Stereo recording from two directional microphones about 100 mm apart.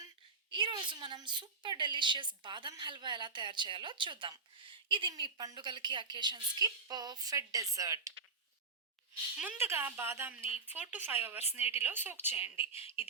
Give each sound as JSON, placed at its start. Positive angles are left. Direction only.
{"t": 0.5, "sound": "a woman's voice", "side_deg": -55}
{"t": 9.6, "sound": "speech", "side_deg": -25}